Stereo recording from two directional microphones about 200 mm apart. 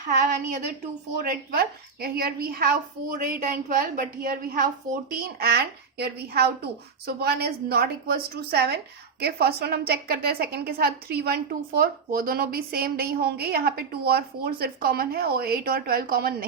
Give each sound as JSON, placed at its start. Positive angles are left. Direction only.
{"t": 0.0, "sound": "a woman's voice", "side_deg": -40}